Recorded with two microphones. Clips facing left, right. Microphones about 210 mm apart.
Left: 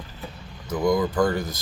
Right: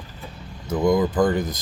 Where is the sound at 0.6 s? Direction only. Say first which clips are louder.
Right 3 dB; 25° right (ahead or behind).